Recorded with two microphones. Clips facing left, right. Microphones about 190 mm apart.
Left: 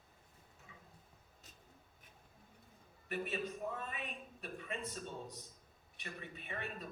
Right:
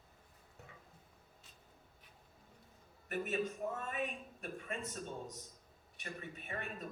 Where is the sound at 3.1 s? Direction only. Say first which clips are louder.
Right 3 dB; 45° right (ahead or behind).